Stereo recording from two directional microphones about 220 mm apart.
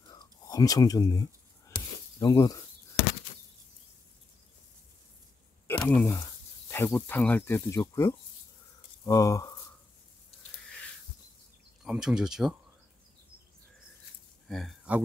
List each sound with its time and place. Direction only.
0.1 s whispering: 15° left (ahead or behind)
1.7 s a sound: 15° left (ahead or behind)
5.7 s speech: 5° left (ahead or behind)
11.8 s speech: 5° right (ahead or behind)
14.5 s speech: centre (ahead or behind)